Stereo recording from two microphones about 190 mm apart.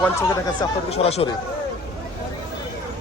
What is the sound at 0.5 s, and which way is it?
Speech, 30° left (ahead or behind).